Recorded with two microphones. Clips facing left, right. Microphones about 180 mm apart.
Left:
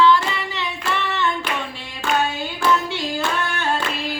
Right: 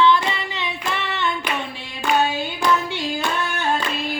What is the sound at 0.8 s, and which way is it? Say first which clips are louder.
Hands: left 3 dB; 15° right (ahead or behind).